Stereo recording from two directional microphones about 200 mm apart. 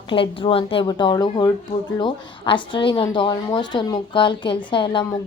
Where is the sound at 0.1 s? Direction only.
25° left (ahead or behind).